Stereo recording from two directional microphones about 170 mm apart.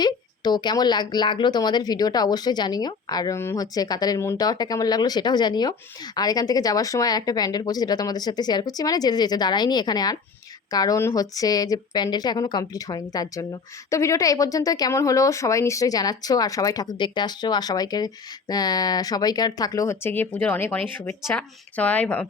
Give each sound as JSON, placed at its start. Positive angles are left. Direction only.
{"t": 0.0, "sound": "speech", "side_deg": 25}